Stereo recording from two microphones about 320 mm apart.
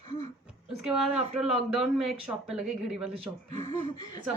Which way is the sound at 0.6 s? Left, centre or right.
Centre.